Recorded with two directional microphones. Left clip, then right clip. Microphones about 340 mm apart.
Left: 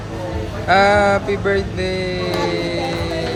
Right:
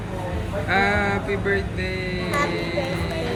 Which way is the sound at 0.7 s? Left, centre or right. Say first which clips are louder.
Left 8 dB; centre.